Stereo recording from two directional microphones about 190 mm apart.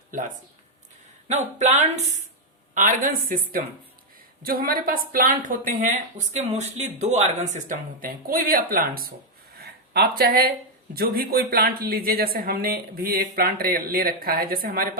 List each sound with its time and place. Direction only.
1.3 s a woman's voice: 35° right (ahead or behind)
4.4 s a woman's voice: 50° right (ahead or behind)
9.6 s a sound: 55° right (ahead or behind)
10.9 s a woman's voice: 50° right (ahead or behind)